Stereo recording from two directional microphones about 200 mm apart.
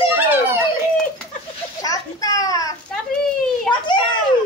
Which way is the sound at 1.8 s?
15° left (ahead or behind).